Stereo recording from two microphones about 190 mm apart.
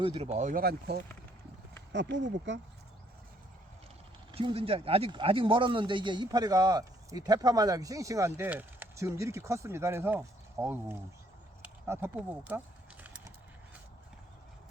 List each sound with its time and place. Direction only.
0.0 s speech: 30° right (ahead or behind); by 1.0 s 55° right (ahead or behind)
1.9 s speech: 70° right (ahead or behind)
4.3 s speech: 25° right (ahead or behind)
11.9 s a sound: 10° right (ahead or behind)